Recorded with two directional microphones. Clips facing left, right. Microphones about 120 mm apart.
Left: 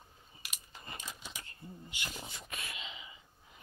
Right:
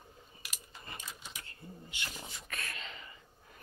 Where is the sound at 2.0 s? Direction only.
15° left (ahead or behind).